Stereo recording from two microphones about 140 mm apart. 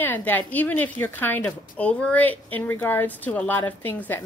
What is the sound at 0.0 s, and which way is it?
A woman's voice, 15° left (ahead or behind).